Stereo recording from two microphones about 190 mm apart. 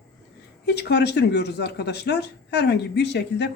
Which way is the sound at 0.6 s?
60° left (ahead or behind).